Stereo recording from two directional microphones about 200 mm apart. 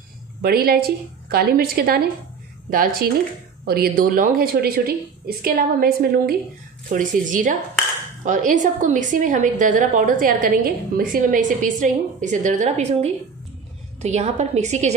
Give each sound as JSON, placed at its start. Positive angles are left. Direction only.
{"t": 0.4, "sound": "a woman's voice", "side_deg": -50}